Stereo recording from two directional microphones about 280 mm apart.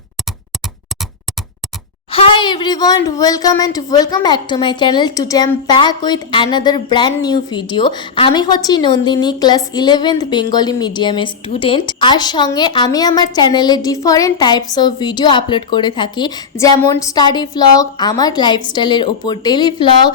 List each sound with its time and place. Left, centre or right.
2.1 s speech: centre